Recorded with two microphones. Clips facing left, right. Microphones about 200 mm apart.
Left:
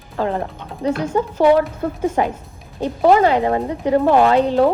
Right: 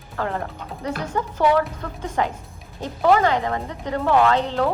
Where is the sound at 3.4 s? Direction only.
30° left (ahead or behind).